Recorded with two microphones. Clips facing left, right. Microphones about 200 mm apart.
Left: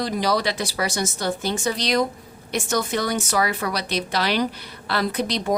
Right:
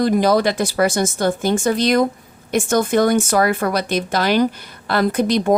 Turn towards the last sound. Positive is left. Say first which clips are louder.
# right 7 dB
turn(degrees=-50)  # may be behind; listen again after turning